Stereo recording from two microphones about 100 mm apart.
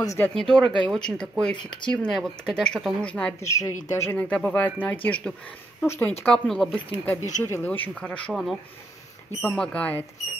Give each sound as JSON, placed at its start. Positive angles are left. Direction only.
{"t": 0.3, "sound": "speech", "side_deg": 5}
{"t": 3.4, "sound": "speech", "side_deg": 30}
{"t": 4.3, "sound": "speech", "side_deg": 15}
{"t": 6.2, "sound": "speech", "side_deg": 5}
{"t": 7.2, "sound": "speech", "side_deg": 30}
{"t": 8.3, "sound": "speech", "side_deg": 0}